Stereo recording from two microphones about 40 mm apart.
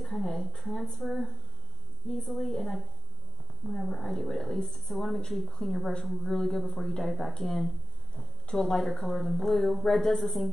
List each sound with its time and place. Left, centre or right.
0.0 s a woman's voice: centre
3.8 s a woman's voice: centre
6.3 s speech: centre
8.8 s a woman's voice: centre